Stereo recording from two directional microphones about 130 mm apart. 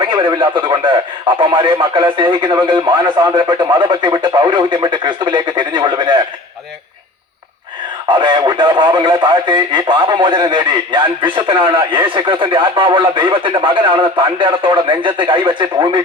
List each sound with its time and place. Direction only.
0.0 s speech: 35° right (ahead or behind)
8.1 s speech: 35° right (ahead or behind)